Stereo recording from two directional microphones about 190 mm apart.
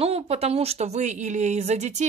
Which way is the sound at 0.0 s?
30° right (ahead or behind).